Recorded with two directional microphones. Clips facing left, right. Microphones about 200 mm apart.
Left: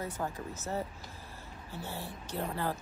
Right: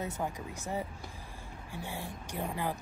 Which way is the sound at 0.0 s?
15° right (ahead or behind).